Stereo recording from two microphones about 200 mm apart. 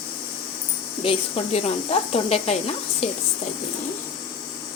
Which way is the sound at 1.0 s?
30° left (ahead or behind).